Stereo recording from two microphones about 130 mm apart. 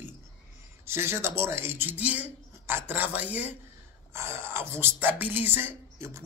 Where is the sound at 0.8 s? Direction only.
20° right (ahead or behind).